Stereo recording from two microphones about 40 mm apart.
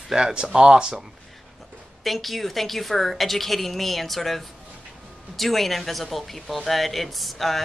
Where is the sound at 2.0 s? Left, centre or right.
Centre.